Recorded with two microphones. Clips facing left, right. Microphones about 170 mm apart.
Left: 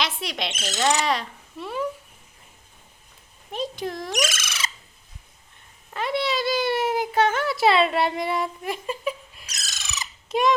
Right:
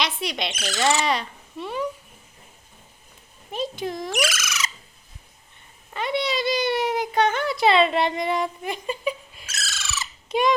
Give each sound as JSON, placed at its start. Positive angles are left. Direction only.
{"t": 0.0, "sound": "squawk", "side_deg": 0}
{"t": 0.5, "sound": "speech", "side_deg": 25}
{"t": 1.0, "sound": "a child's voice", "side_deg": 0}
{"t": 3.5, "sound": "speech", "side_deg": 0}
{"t": 4.1, "sound": "bird", "side_deg": 25}
{"t": 5.9, "sound": "a sound", "side_deg": 0}
{"t": 9.5, "sound": "owl", "side_deg": 15}
{"t": 10.2, "sound": "a sound", "side_deg": 0}